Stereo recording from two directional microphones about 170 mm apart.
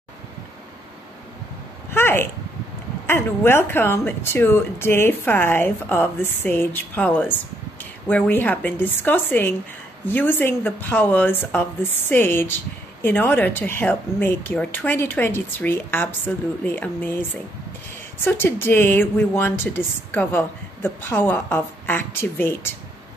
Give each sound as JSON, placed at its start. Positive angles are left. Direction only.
{"t": 1.9, "sound": "a sound", "side_deg": 15}
{"t": 3.1, "sound": "a woman's voice", "side_deg": 15}
{"t": 18.2, "sound": "a woman's voice", "side_deg": 10}